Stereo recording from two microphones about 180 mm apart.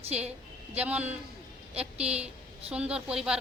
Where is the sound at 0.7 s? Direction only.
10° right (ahead or behind).